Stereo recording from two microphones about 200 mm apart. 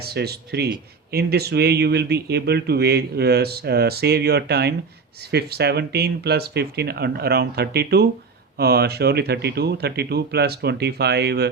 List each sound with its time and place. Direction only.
0.0 s speech: 50° right (ahead or behind)